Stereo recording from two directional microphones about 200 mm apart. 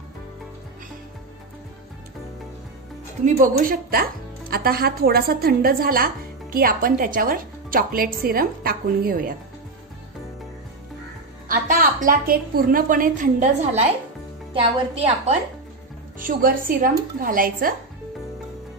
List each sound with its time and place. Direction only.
3.3 s speech: 45° right (ahead or behind)
11.4 s a woman's voice: 40° right (ahead or behind)
16.2 s speech: 45° right (ahead or behind)